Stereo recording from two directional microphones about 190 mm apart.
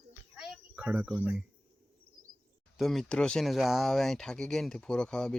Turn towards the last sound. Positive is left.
turn(degrees=5)  # may be behind; listen again after turning